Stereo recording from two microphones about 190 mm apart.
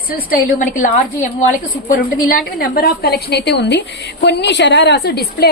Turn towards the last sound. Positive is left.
turn(degrees=55)  # may be behind; listen again after turning